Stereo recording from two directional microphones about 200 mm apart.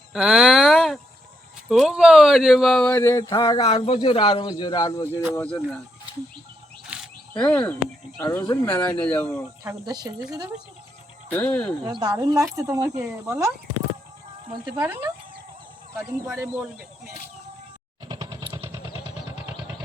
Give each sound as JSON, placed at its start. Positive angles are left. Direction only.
{"t": 0.1, "sound": "a sound", "side_deg": -5}
{"t": 1.8, "sound": "speech", "side_deg": -5}
{"t": 3.6, "sound": "speech", "side_deg": 30}
{"t": 6.8, "sound": "a sound", "side_deg": -5}
{"t": 7.4, "sound": "speech", "side_deg": 10}
{"t": 9.6, "sound": "speech", "side_deg": -20}
{"t": 11.3, "sound": "speech", "side_deg": 10}
{"t": 11.8, "sound": "speech", "side_deg": -20}
{"t": 14.5, "sound": "speech", "side_deg": -20}
{"t": 16.0, "sound": "speech", "side_deg": -10}
{"t": 18.1, "sound": "vehicle", "side_deg": -15}